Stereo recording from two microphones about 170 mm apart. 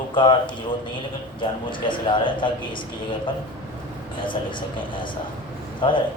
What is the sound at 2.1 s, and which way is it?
Speech, 30° left (ahead or behind).